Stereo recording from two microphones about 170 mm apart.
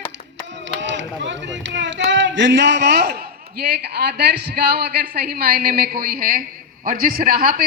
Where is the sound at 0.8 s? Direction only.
90° right.